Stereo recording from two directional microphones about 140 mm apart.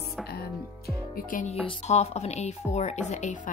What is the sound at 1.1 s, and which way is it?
Music, 70° left (ahead or behind).